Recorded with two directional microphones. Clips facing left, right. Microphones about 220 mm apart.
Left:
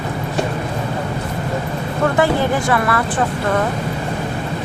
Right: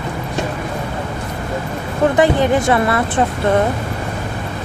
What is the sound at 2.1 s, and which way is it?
Speech, 20° right (ahead or behind).